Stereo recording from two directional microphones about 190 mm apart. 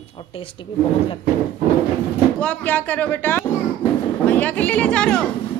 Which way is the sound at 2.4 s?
5° left (ahead or behind).